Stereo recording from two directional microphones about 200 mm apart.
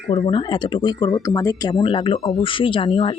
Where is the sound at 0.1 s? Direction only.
25° left (ahead or behind).